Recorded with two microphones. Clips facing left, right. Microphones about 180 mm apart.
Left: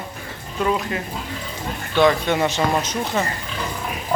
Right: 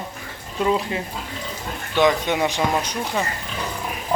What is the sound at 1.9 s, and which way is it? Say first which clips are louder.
Speech: left 1 dB; 15° right (ahead or behind).